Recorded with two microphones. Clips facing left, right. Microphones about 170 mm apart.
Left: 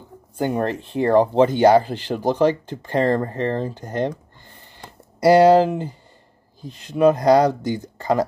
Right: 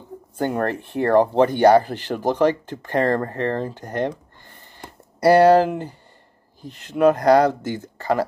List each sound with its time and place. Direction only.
0.4 s speech: 15° left (ahead or behind)
5.2 s speech: 15° left (ahead or behind)